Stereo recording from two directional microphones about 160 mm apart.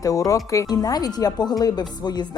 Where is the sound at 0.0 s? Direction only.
20° left (ahead or behind).